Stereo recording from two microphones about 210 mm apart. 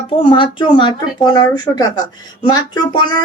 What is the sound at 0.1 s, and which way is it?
Speech, 25° left (ahead or behind).